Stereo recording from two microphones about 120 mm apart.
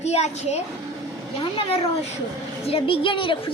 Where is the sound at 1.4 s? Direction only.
55° left (ahead or behind).